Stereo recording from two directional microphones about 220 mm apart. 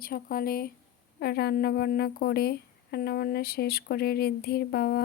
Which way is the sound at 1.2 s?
45° left (ahead or behind).